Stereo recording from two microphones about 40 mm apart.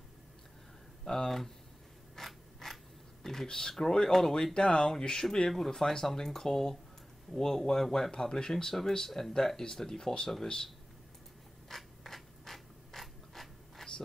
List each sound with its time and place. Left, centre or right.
1.0 s speech: centre
2.1 s mechanisms: centre
3.4 s speech: centre
11.7 s mechanisms: centre